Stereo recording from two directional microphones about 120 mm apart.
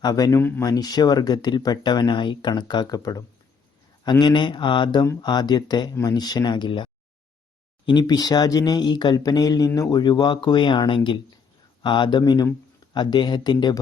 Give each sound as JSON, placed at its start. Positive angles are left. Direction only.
{"t": 0.0, "sound": "speech", "side_deg": 30}
{"t": 0.6, "sound": "speech", "side_deg": 30}